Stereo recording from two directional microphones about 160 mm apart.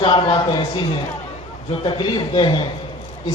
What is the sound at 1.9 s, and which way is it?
Speech, 30° left (ahead or behind).